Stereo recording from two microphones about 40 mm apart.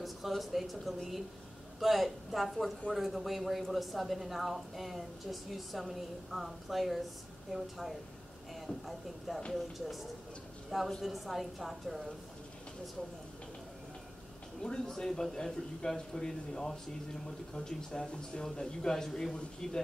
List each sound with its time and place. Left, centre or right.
0.0 s speech: centre
14.6 s a man's voice: centre